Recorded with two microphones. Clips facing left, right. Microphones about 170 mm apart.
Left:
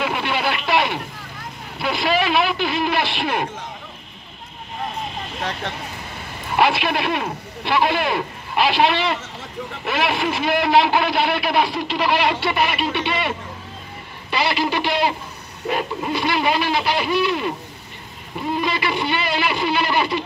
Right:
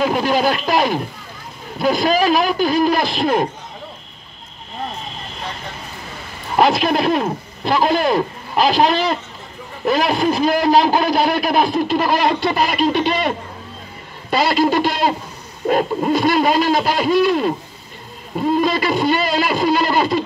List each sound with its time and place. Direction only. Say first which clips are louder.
0.0 s speech: right 6 dB; 40° right (ahead or behind)
6.5 s speech: right 4 dB; 40° right (ahead or behind)
14.3 s speech: right 6 dB; 45° right (ahead or behind)
18.6 s speech: right 3 dB; 40° right (ahead or behind)